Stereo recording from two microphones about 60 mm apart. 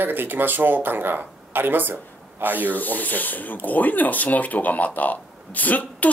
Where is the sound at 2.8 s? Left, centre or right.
Left.